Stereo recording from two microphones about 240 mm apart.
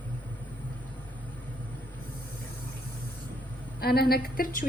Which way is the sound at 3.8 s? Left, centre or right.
Left.